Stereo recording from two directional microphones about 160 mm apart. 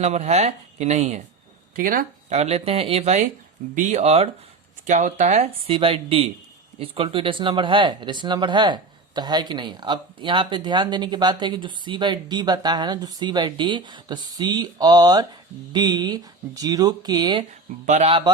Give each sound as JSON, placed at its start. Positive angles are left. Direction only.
{"t": 0.0, "sound": "speech", "side_deg": -45}
{"t": 1.7, "sound": "speech", "side_deg": -60}
{"t": 2.3, "sound": "speech", "side_deg": -45}
{"t": 17.8, "sound": "speech", "side_deg": -45}